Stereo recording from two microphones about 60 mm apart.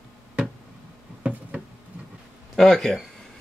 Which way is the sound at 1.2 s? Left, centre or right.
Right.